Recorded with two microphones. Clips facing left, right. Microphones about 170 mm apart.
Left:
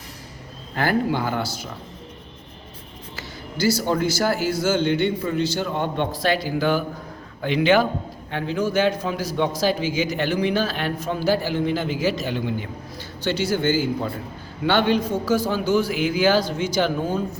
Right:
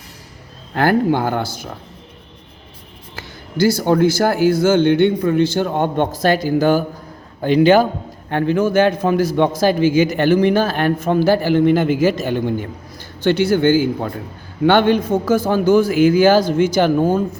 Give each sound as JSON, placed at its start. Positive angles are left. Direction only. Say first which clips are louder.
{"t": 0.7, "sound": "a man's voice", "louder": "right 6 dB", "side_deg": -55}
{"t": 3.2, "sound": "a man's voice", "louder": "right 8 dB", "side_deg": -55}
{"t": 8.3, "sound": "a man's voice", "louder": "right 7 dB", "side_deg": -55}